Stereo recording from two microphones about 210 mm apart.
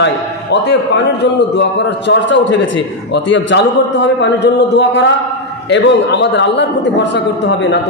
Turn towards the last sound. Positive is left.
turn(degrees=55)  # may be behind; listen again after turning